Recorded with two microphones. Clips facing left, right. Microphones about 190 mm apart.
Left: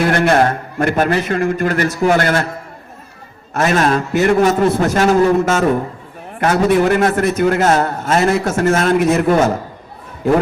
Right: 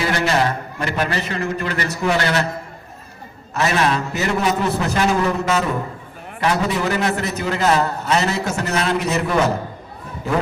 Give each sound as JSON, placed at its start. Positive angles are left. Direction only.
{"t": 0.0, "sound": "a man's voice", "side_deg": 55}
{"t": 3.5, "sound": "a man's voice", "side_deg": 50}